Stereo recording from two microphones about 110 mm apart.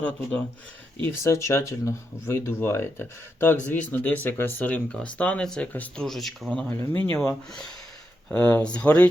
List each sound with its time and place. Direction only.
1.0 s speech: 25° left (ahead or behind)
6.1 s speech: centre (ahead or behind)
6.7 s speech: 15° left (ahead or behind)
8.3 s speech: 15° left (ahead or behind)